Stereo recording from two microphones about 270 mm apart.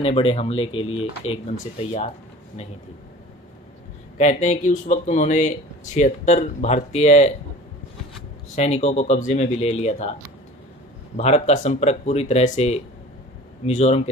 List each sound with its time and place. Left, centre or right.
0.0 s speech: left
4.2 s speech: left
8.5 s speech: left
11.1 s speech: left